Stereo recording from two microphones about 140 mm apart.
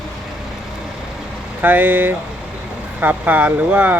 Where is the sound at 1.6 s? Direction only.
15° right (ahead or behind).